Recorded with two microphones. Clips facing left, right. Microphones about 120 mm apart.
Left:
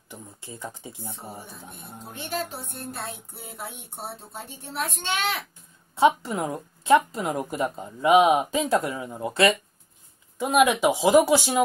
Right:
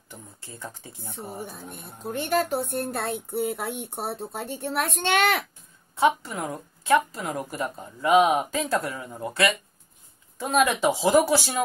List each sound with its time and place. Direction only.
0.1 s speech: 15° left (ahead or behind)
2.0 s speech: 55° right (ahead or behind)
5.9 s speech: 25° left (ahead or behind)
10.4 s speech: 10° left (ahead or behind)